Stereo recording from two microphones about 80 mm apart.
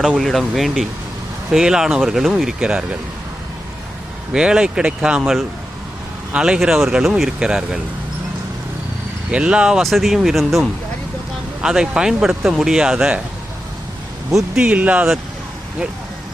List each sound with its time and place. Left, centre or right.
0.2 s speech: centre
4.3 s speech: centre
6.3 s speech: centre
9.3 s speech: centre
14.3 s speech: centre
14.7 s speech: centre